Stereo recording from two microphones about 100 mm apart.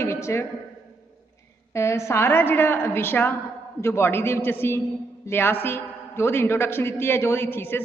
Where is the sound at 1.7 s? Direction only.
30° left (ahead or behind).